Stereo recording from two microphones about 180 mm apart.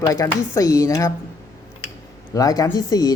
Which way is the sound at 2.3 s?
20° left (ahead or behind).